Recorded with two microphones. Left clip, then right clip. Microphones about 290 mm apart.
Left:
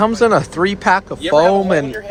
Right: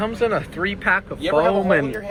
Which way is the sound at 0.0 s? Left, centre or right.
Left.